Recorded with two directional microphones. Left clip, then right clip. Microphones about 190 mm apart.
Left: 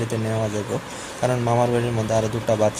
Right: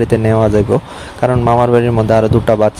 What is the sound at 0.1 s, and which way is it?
A man's voice, 50° right (ahead or behind).